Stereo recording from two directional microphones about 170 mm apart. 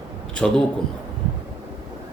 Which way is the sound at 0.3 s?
5° left (ahead or behind).